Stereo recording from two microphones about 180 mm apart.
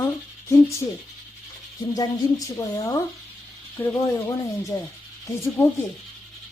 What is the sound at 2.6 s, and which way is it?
Speech, 20° left (ahead or behind).